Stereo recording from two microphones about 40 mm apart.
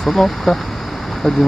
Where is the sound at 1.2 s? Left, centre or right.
Centre.